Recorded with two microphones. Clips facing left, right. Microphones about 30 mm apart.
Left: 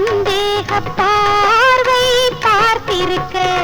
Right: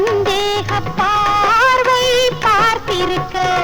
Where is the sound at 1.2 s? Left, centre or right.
Left.